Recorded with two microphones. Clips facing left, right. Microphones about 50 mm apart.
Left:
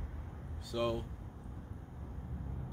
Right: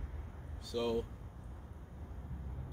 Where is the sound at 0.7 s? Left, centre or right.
Left.